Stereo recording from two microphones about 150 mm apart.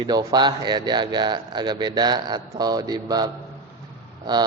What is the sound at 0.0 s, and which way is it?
A man's voice, 25° right (ahead or behind).